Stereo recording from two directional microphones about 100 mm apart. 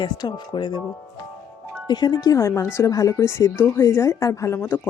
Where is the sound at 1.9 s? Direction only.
45° left (ahead or behind).